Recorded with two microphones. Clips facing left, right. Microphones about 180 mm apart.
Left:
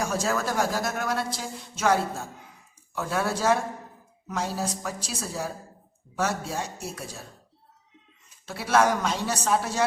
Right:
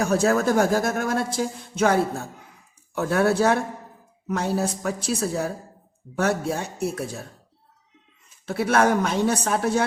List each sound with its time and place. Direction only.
0.0 s a woman's voice: 60° right (ahead or behind)
8.4 s a woman's voice: 55° right (ahead or behind)